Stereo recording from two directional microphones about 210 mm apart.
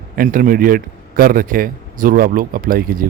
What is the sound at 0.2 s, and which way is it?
A man's voice, 40° right (ahead or behind).